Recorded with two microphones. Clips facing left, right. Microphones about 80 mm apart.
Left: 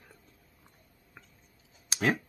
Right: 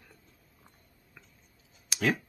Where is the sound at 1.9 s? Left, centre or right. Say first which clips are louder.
Even; left.